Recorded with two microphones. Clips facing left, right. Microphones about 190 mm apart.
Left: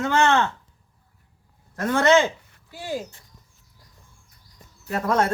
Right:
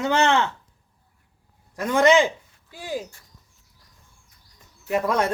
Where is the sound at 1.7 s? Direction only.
15° right (ahead or behind).